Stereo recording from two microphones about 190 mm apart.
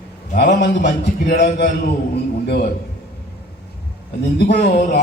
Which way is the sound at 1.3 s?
60° left (ahead or behind).